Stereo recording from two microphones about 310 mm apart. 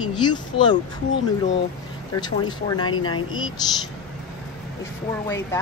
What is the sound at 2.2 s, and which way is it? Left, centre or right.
Speech, centre.